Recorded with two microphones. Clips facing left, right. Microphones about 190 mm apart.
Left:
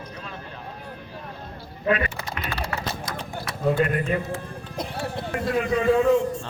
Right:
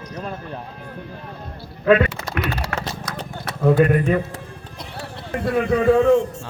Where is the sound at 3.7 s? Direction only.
40° right (ahead or behind).